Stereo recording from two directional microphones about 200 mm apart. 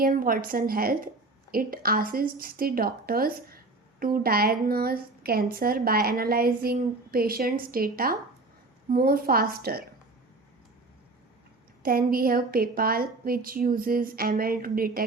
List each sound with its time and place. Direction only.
0.0 s a woman's voice: 45° right (ahead or behind)
11.8 s a woman's voice: 45° right (ahead or behind)